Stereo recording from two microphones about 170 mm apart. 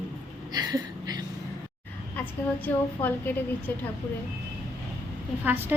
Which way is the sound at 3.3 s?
10° left (ahead or behind).